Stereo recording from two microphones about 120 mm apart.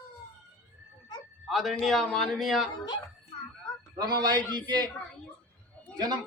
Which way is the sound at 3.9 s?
35° right (ahead or behind).